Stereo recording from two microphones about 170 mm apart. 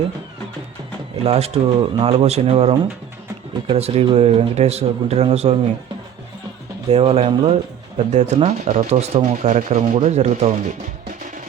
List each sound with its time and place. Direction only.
1.2 s speech: 35° right (ahead or behind)
6.9 s speech: 35° right (ahead or behind)